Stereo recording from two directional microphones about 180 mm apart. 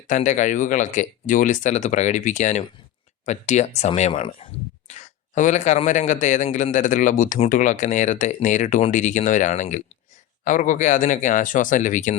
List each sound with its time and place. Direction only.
0.1 s a man's voice: 45° left (ahead or behind)
4.9 s a man's voice: 45° left (ahead or behind)